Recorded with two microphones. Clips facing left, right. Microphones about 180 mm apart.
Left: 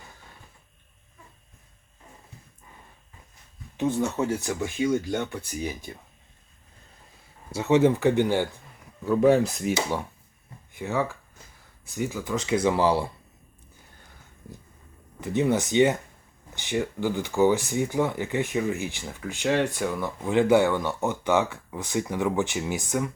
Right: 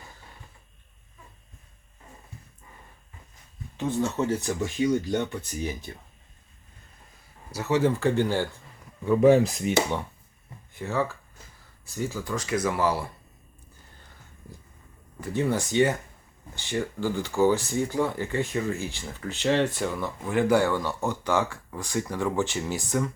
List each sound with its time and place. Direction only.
3.8 s speech: 15° left (ahead or behind)
7.5 s speech: 20° left (ahead or behind)
9.0 s speech: centre (ahead or behind)
10.7 s speech: 15° left (ahead or behind)
15.2 s speech: 20° left (ahead or behind)
20.3 s speech: 20° left (ahead or behind)